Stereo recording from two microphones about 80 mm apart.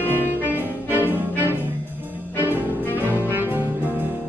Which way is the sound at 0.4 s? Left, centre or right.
Right.